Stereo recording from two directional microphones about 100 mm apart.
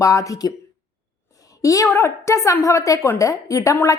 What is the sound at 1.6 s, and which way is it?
A woman's voice, 35° left (ahead or behind).